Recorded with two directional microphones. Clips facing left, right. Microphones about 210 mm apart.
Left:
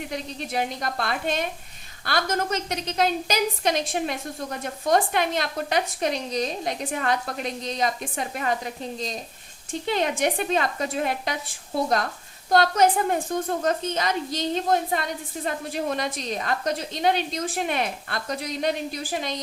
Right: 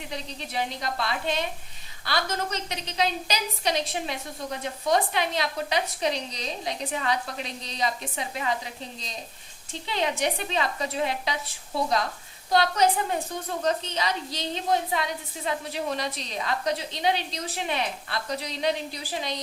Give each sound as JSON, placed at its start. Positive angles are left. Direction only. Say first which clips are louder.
{"t": 0.1, "sound": "a woman's voice", "louder": "left 1 dB", "side_deg": 50}